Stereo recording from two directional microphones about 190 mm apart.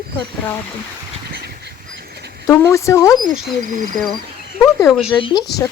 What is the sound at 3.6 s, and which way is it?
Speech, 40° right (ahead or behind).